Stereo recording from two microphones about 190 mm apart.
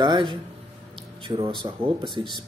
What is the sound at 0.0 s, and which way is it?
Speech, 25° right (ahead or behind).